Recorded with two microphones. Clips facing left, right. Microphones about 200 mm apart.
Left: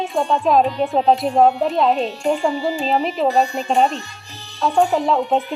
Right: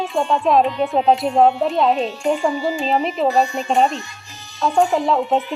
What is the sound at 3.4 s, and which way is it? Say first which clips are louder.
Speech: even; 35° left (ahead or behind).